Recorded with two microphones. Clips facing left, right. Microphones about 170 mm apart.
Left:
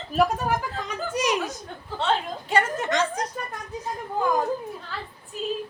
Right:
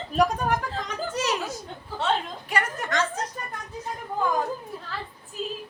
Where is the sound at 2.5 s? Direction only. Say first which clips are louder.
Left 4 dB; 25° left (ahead or behind).